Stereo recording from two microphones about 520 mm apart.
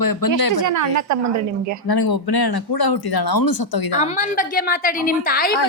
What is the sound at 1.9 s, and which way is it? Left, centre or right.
Speech, left.